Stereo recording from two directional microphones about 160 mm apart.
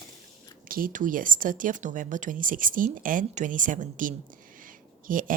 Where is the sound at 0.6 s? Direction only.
60° right (ahead or behind).